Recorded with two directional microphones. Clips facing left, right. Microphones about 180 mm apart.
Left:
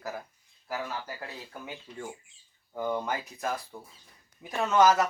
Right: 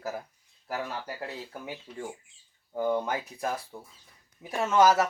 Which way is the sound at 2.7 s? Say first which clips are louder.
Right 3 dB; 10° right (ahead or behind).